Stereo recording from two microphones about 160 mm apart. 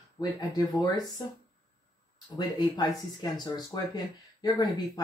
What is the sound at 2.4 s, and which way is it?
Speech, 25° left (ahead or behind).